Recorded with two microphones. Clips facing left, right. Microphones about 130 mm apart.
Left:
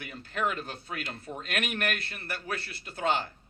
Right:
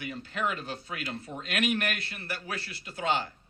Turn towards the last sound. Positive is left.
turn(degrees=50)  # may be behind; listen again after turning